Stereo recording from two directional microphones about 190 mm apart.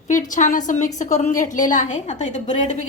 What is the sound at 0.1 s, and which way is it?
A woman's voice, 40° left (ahead or behind).